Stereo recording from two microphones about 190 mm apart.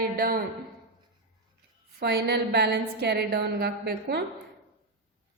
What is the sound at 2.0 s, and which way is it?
A woman's voice, 60° right (ahead or behind).